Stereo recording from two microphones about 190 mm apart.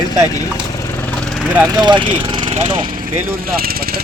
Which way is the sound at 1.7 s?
25° right (ahead or behind).